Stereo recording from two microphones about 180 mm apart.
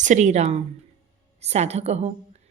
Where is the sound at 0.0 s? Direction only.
40° right (ahead or behind).